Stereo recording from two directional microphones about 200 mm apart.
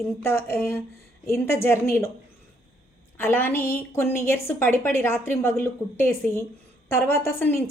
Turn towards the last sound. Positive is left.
turn(degrees=10)  # may be behind; listen again after turning